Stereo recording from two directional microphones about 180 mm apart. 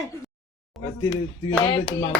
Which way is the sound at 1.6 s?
25° left (ahead or behind).